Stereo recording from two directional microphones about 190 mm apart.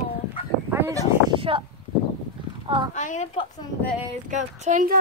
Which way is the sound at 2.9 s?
40° left (ahead or behind).